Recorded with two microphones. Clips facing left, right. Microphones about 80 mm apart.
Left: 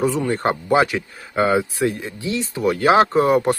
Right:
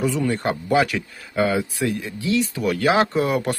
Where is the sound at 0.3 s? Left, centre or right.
Left.